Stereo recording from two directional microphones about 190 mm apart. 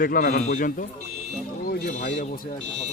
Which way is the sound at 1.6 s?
45° left (ahead or behind).